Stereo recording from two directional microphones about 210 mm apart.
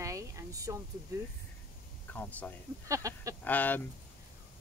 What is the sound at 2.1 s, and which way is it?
Speech, 5° left (ahead or behind).